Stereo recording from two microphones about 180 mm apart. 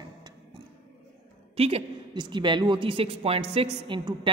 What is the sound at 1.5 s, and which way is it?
A woman's voice, 35° right (ahead or behind).